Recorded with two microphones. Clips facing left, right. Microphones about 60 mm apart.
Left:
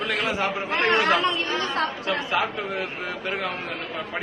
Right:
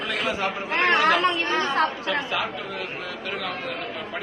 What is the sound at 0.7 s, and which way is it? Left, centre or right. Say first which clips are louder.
A woman's voice: right 1 dB; right.